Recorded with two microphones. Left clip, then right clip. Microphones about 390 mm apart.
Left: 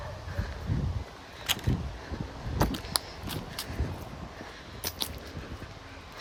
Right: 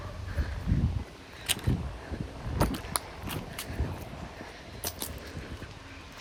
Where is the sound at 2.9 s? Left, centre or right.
Centre.